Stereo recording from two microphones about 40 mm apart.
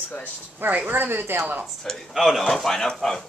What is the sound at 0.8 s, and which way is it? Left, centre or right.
Speech, right.